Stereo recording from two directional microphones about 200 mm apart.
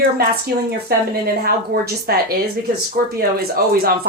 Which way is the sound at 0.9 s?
50° right (ahead or behind).